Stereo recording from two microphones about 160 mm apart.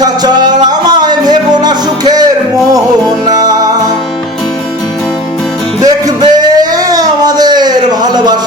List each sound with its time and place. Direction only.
0.0 s music: 25° right (ahead or behind)
3.2 s music: 25° right (ahead or behind)
5.8 s a sound: 25° right (ahead or behind)